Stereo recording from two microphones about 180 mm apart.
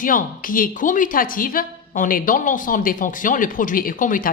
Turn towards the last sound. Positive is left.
turn(degrees=50)  # may be behind; listen again after turning